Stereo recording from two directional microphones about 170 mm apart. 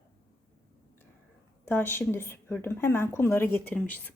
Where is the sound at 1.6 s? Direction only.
15° left (ahead or behind).